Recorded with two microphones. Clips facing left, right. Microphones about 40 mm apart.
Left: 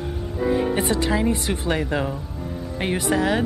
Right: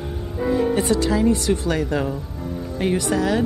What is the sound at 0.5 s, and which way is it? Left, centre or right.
Speech, left.